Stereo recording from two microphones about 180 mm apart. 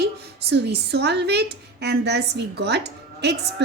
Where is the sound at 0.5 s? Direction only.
65° right (ahead or behind).